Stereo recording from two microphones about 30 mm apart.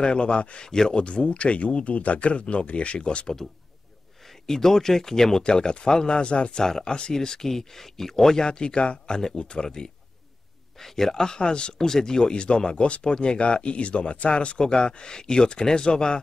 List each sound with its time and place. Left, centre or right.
0.0 s speech: left
0.7 s speech: centre
0.9 s speech: left
4.3 s speech: centre
5.4 s speech: left
6.6 s speech: centre
6.9 s speech: left
7.2 s speech: centre
8.5 s speech: left
10.8 s speech: centre; by 11.7 s left
11.8 s speech: centre; by 14.6 s left
14.6 s speech: left